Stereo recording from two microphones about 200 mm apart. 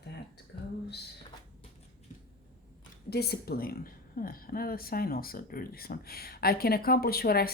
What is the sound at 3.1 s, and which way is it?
A woman's voice, 50° left (ahead or behind).